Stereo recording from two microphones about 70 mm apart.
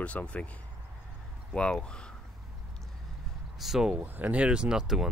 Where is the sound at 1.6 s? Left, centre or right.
Centre.